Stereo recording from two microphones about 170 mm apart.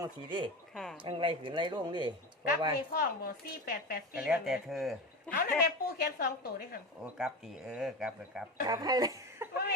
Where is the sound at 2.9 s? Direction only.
60° left (ahead or behind).